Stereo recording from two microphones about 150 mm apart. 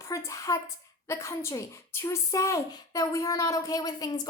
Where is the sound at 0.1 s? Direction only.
20° left (ahead or behind).